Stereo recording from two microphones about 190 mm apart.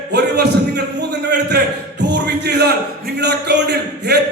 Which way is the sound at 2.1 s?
60° right (ahead or behind).